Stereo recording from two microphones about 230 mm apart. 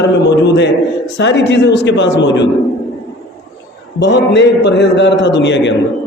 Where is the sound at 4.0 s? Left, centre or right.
Left.